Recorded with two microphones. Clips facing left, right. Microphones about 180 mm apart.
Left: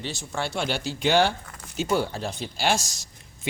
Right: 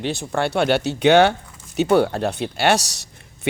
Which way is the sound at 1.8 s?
65° right (ahead or behind).